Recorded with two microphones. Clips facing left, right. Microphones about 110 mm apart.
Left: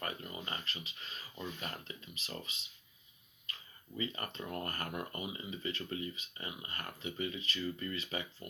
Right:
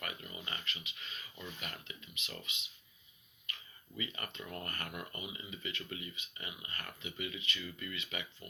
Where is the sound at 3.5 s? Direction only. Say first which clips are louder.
Right 1 dB; 30° left (ahead or behind).